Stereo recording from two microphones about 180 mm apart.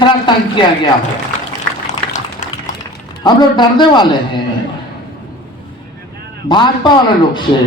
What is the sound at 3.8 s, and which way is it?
Speech, 25° left (ahead or behind).